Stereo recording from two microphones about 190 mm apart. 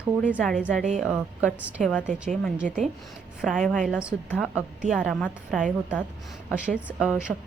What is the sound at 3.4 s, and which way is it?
A woman's voice, centre (ahead or behind).